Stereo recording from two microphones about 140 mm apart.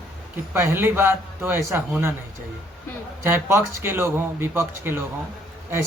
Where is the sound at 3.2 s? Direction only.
15° right (ahead or behind).